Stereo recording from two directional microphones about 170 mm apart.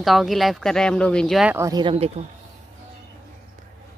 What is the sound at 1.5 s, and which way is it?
Speech, 20° right (ahead or behind).